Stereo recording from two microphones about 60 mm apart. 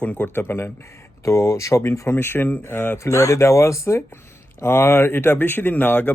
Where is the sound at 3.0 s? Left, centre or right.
Left.